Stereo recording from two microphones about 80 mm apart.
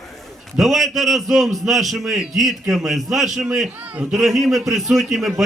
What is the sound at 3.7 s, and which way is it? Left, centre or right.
Speech, right.